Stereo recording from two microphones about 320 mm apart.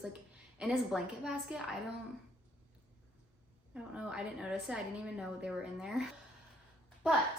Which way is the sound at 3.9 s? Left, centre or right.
Centre.